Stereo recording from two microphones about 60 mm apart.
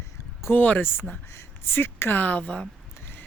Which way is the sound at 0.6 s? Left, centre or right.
Left.